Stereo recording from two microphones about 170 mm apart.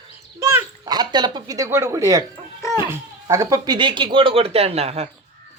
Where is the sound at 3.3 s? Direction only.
20° right (ahead or behind); by 5.1 s 40° right (ahead or behind).